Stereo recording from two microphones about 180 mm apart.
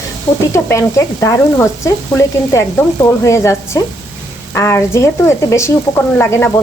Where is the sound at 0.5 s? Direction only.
15° left (ahead or behind).